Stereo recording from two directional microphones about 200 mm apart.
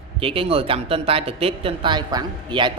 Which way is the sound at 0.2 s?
30° right (ahead or behind).